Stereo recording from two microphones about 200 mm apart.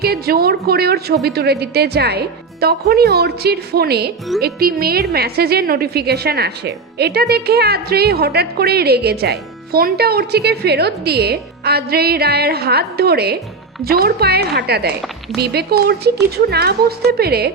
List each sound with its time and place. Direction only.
0.0 s speech: 50° right (ahead or behind)